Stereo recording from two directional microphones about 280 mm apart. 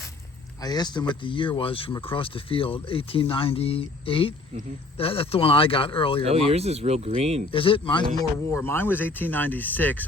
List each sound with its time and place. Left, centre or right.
0.6 s speech: centre
6.5 s speech: right
7.5 s speech: centre